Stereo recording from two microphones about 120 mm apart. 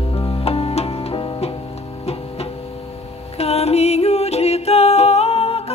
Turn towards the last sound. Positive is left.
turn(degrees=60)  # may be behind; listen again after turning